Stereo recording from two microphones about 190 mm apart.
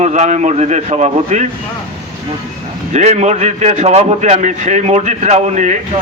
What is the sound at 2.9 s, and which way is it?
A man's voice, 35° right (ahead or behind).